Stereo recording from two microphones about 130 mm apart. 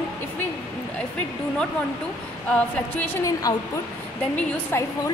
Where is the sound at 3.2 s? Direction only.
30° left (ahead or behind).